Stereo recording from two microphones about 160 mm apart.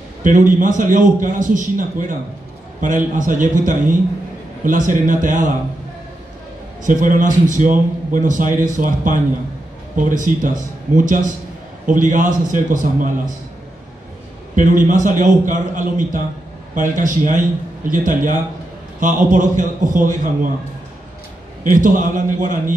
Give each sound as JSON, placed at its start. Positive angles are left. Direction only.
{"t": 0.2, "sound": "a man's voice", "side_deg": -55}
{"t": 6.8, "sound": "a man's voice", "side_deg": -55}
{"t": 14.5, "sound": "a man's voice", "side_deg": -55}
{"t": 21.6, "sound": "a man's voice", "side_deg": -55}